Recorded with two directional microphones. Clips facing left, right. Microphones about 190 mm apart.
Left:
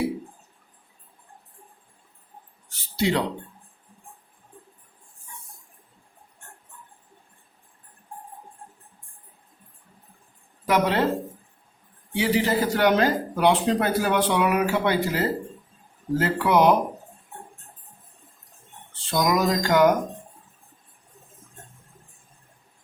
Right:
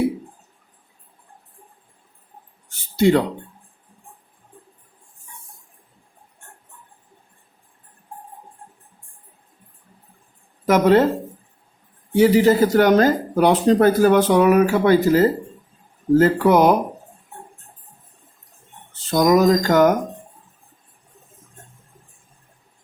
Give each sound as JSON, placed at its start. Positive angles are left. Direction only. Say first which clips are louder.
{"t": 2.9, "sound": "speech", "louder": "right 8 dB", "side_deg": -50}
{"t": 10.7, "sound": "speech", "louder": "right 8 dB", "side_deg": -45}
{"t": 12.1, "sound": "speech", "louder": "right 9 dB", "side_deg": -45}
{"t": 18.9, "sound": "speech", "louder": "right 7 dB", "side_deg": -40}